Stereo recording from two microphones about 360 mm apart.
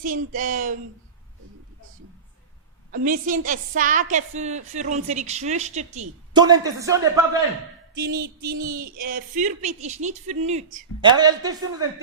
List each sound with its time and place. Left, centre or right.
0.0 s a woman's voice: right
2.9 s a woman's voice: right
7.9 s a woman's voice: right; by 11.9 s centre